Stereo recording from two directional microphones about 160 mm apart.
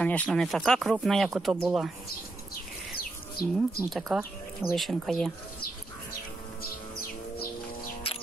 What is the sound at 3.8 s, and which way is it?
Speech, centre (ahead or behind).